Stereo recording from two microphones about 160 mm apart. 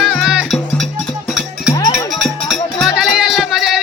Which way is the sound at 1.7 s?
20° left (ahead or behind).